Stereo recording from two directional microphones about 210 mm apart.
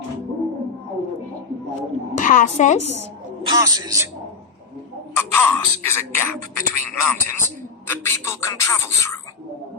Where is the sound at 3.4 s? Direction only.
15° right (ahead or behind).